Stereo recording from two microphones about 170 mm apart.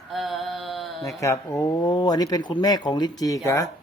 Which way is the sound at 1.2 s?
20° left (ahead or behind).